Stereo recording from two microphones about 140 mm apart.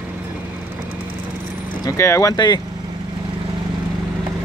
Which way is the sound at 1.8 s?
20° left (ahead or behind).